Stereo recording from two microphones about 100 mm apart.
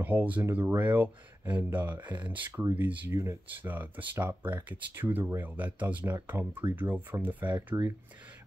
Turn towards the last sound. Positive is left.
turn(degrees=-15)  # may be behind; listen again after turning